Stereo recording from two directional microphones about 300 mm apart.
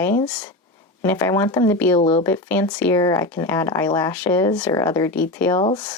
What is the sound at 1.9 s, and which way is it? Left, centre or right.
Speech, centre.